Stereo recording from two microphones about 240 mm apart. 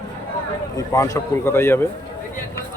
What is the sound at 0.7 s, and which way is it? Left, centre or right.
Speech, centre.